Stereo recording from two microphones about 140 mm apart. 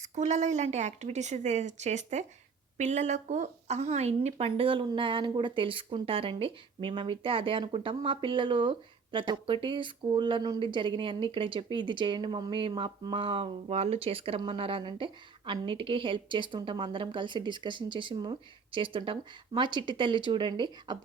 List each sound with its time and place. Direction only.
0.0 s speech: 55° right (ahead or behind); by 21.0 s 35° right (ahead or behind)